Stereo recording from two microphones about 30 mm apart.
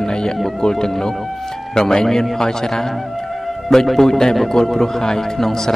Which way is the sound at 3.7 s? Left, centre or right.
Centre.